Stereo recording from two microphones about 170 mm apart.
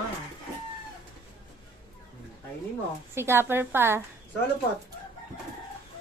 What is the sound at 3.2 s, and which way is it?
Speech, 15° right (ahead or behind).